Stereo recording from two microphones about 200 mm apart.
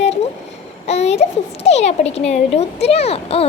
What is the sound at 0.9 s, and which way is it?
A child's voice, 35° left (ahead or behind).